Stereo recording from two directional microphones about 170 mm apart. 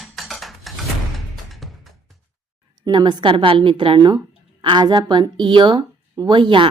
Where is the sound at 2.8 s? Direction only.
25° right (ahead or behind).